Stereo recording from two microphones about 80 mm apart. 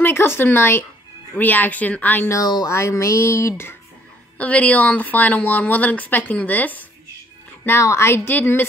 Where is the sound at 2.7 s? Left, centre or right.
Left.